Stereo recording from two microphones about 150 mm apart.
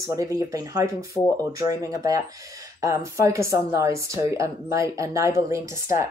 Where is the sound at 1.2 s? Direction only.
25° left (ahead or behind).